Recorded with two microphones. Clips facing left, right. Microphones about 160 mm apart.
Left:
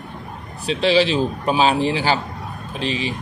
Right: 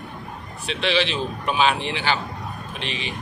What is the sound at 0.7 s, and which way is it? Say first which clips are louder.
A man's voice: left 6 dB; 35° left (ahead or behind).